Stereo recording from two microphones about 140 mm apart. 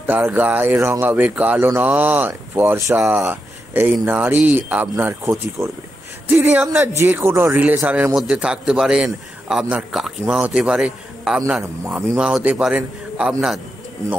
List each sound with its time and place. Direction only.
0.0 s a man's voice: 15° right (ahead or behind)